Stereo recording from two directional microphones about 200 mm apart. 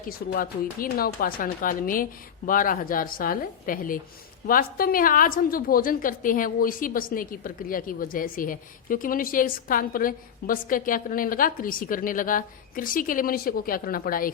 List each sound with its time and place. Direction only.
0.0 s a woman's voice: 45° left (ahead or behind)